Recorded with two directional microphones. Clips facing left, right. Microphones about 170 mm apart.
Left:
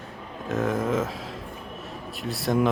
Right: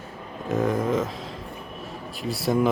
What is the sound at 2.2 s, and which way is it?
Speech, centre (ahead or behind).